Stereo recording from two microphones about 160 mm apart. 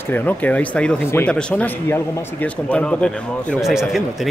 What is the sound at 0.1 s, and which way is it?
A man's voice, 10° left (ahead or behind).